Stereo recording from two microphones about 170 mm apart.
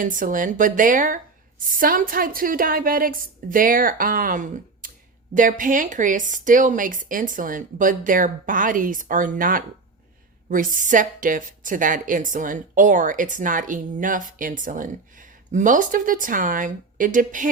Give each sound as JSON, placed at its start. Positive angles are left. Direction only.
{"t": 0.0, "sound": "a woman's voice", "side_deg": -50}